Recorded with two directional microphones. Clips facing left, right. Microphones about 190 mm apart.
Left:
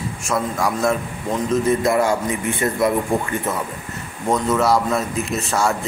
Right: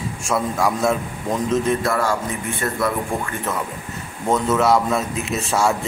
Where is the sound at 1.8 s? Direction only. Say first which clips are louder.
Left 3 dB; 20° left (ahead or behind).